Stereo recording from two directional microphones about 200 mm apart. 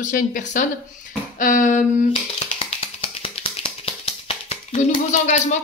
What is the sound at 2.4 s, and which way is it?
Finger snapping, 30° left (ahead or behind).